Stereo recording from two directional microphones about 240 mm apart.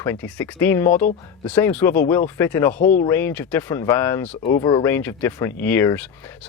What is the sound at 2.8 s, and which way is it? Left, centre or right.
Speech, left.